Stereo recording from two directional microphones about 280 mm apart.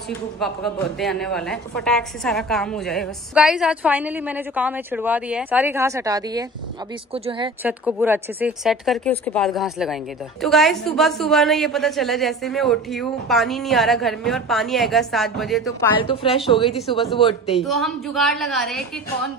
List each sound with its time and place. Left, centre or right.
0.1 s a woman's voice: centre
7.6 s a woman's voice: centre
16.0 s a woman's voice: centre
16.6 s a woman's voice: centre
17.2 s a woman's voice: centre
17.6 s a woman's voice: centre